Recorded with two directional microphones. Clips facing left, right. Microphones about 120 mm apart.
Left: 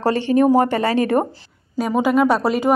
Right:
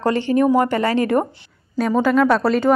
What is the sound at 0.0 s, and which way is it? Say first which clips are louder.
Speech: left 1 dB; 25° left (ahead or behind).